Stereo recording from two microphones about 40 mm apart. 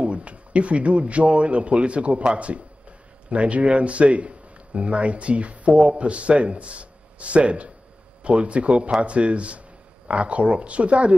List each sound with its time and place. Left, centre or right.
0.0 s a man's voice: right